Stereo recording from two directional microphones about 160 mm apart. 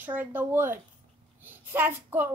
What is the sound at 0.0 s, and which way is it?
A woman's voice, 10° right (ahead or behind).